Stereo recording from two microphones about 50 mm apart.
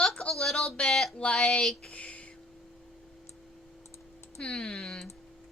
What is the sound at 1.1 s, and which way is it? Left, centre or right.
Speech, left.